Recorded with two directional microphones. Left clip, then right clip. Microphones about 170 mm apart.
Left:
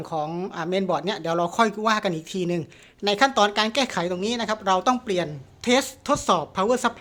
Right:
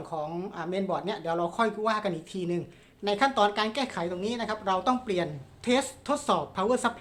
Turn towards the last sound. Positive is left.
turn(degrees=30)  # may be behind; listen again after turning